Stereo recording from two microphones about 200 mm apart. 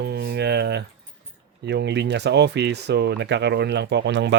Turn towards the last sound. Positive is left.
turn(degrees=-60)  # may be behind; listen again after turning